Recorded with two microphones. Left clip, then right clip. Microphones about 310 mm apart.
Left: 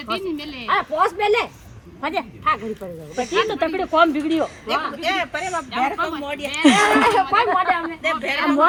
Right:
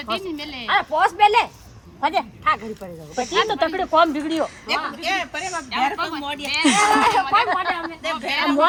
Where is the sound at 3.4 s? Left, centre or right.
Right.